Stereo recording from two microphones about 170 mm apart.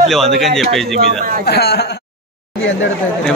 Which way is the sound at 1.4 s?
75° left (ahead or behind).